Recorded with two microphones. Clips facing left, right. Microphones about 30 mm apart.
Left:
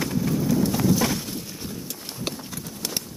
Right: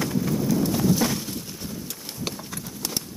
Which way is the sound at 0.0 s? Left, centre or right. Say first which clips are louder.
Even; centre.